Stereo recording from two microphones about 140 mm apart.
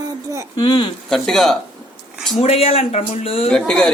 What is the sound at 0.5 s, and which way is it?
Speech, 30° left (ahead or behind).